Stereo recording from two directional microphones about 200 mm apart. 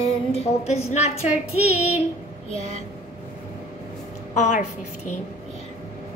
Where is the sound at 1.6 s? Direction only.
10° right (ahead or behind).